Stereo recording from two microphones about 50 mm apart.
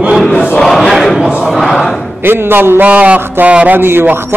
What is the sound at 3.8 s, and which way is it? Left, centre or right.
Speech, right.